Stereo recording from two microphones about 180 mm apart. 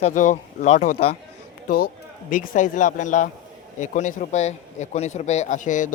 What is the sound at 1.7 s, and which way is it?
A man's voice, 55° left (ahead or behind).